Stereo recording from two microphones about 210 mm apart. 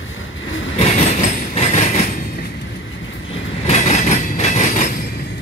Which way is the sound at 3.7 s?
30° left (ahead or behind).